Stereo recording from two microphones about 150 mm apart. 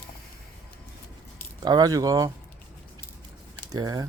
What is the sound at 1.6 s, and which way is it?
Speech, 25° right (ahead or behind).